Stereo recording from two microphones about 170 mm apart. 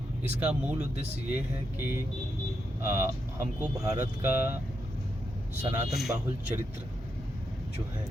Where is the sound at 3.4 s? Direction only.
20° right (ahead or behind).